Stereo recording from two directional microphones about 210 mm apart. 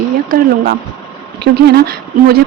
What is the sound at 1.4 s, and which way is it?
Speech, 50° right (ahead or behind).